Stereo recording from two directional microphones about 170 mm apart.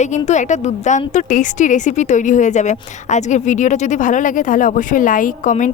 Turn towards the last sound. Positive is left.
turn(degrees=50)  # may be behind; listen again after turning